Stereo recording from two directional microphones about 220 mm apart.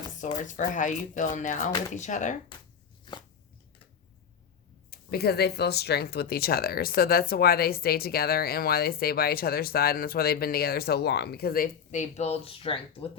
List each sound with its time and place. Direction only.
0.2 s speech: 35° left (ahead or behind)
3.1 s a sound: 20° left (ahead or behind)
4.9 s speech: 45° left (ahead or behind); by 13.1 s 25° left (ahead or behind)